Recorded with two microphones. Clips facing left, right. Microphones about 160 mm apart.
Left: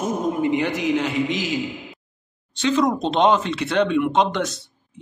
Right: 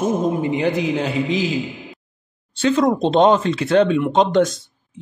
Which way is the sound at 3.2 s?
45° right (ahead or behind).